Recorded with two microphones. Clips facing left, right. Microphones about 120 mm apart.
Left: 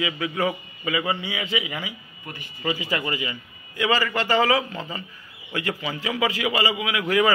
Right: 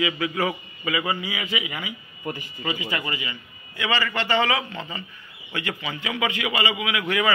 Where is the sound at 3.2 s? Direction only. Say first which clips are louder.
Left 3 dB; 45° left (ahead or behind).